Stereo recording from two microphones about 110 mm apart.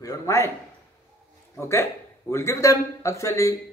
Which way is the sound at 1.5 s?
25° left (ahead or behind).